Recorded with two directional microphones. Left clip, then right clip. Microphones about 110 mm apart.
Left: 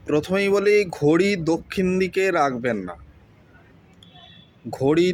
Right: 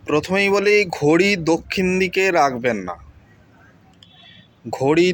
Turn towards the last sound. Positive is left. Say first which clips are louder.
# right 3 dB
turn(degrees=15)  # may be behind; listen again after turning